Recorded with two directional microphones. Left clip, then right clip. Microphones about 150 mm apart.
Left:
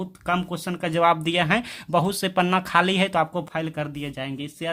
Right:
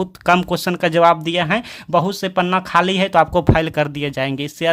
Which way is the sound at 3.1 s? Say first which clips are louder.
Right 10 dB; 40° right (ahead or behind).